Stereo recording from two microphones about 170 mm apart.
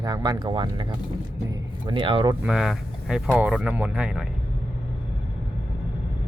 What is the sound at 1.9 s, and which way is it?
Speech, 30° right (ahead or behind).